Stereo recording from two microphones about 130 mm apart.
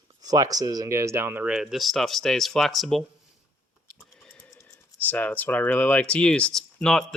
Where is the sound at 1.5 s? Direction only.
Centre (ahead or behind).